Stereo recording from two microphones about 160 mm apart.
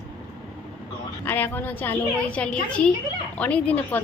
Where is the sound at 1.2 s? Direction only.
10° left (ahead or behind).